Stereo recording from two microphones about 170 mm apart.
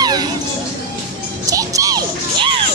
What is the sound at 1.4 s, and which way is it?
Music, 20° right (ahead or behind).